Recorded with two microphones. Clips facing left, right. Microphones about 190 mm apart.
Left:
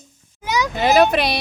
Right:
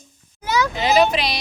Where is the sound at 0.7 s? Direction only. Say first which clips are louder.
Left 4 dB; 55° left (ahead or behind).